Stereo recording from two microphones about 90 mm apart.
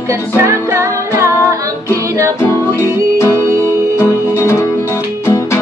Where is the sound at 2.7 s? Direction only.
30° left (ahead or behind).